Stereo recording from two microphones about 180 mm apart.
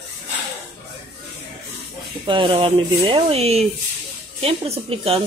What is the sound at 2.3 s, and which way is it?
Speech, 30° right (ahead or behind).